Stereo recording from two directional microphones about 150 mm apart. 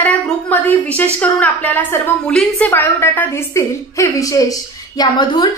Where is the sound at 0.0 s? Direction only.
10° left (ahead or behind).